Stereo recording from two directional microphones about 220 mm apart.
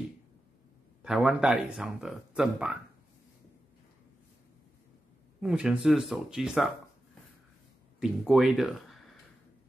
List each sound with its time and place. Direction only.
1.0 s speech: centre (ahead or behind)
5.4 s speech: centre (ahead or behind)
8.0 s speech: centre (ahead or behind)